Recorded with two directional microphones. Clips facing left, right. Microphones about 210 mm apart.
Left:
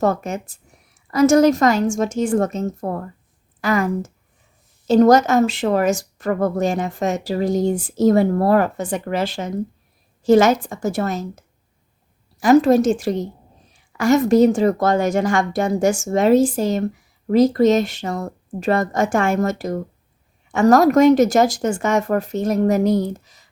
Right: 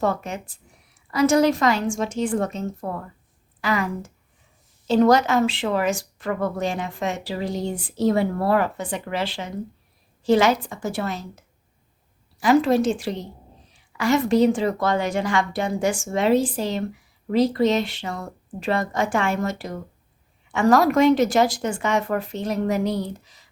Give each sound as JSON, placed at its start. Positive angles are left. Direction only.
{"t": 0.0, "sound": "speech", "side_deg": 45}